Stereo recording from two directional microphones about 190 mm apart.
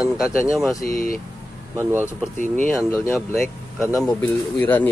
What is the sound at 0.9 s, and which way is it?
Speech, 50° left (ahead or behind).